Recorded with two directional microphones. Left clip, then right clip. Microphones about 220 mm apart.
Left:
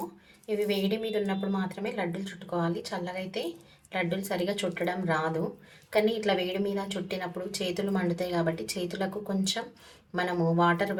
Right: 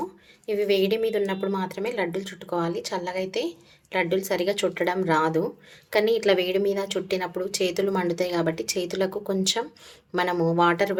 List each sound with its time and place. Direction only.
0.4 s a woman's voice: 45° right (ahead or behind)